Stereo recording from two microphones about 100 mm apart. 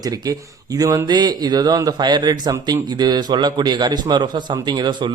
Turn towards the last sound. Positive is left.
turn(degrees=-50)  # may be behind; listen again after turning